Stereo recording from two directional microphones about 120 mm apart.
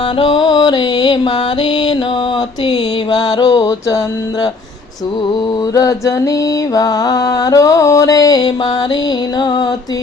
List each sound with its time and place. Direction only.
0.2 s music: 35° left (ahead or behind)
5.7 s music: 25° left (ahead or behind)